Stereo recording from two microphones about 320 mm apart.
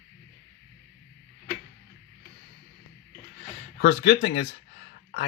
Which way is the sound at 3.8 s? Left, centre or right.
Left.